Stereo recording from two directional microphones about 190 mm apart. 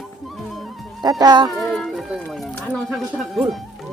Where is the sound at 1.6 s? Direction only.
Centre (ahead or behind).